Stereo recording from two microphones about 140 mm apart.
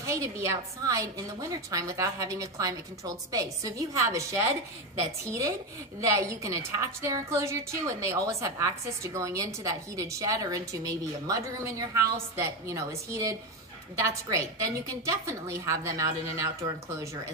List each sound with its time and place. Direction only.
0.0 s a woman's voice: 20° right (ahead or behind)